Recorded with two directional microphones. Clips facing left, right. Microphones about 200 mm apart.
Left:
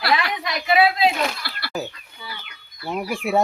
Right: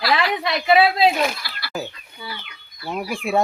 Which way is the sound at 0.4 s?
30° right (ahead or behind).